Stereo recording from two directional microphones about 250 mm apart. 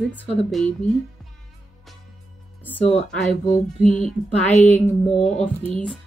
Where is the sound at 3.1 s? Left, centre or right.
Centre.